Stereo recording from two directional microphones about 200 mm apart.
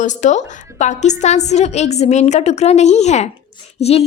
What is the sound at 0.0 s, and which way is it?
A woman's voice, 35° left (ahead or behind).